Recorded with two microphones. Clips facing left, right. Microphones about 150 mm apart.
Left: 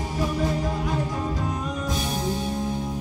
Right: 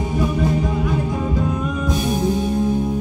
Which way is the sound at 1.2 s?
55° right (ahead or behind).